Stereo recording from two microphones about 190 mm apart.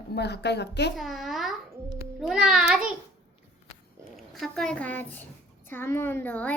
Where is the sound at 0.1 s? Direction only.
60° left (ahead or behind).